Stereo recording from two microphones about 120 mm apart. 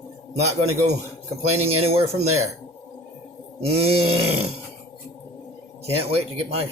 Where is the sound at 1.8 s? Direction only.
55° right (ahead or behind).